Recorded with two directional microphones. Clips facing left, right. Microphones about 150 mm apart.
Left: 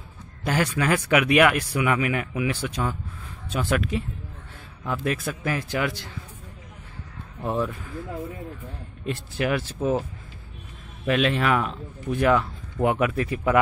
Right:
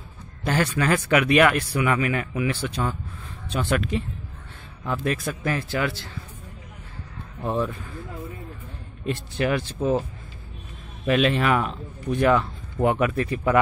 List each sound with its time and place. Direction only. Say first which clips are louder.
0.4 s speech: right 1 dB; 10° left (ahead or behind)
5.0 s speech: right 1 dB; 5° left (ahead or behind)
7.4 s speech: right 1 dB; 5° left (ahead or behind)
9.0 s speech: right 2 dB; 5° left (ahead or behind)
11.1 s speech: right 1 dB; centre (ahead or behind)